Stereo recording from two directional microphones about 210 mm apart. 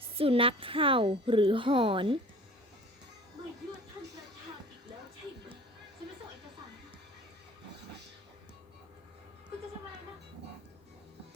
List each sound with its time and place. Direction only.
0.2 s a woman's voice: 25° right (ahead or behind)